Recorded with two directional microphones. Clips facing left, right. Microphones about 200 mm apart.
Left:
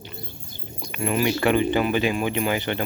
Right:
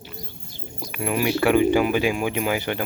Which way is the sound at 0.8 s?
5° right (ahead or behind).